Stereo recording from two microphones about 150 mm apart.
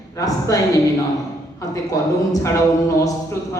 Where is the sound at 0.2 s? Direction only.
25° left (ahead or behind).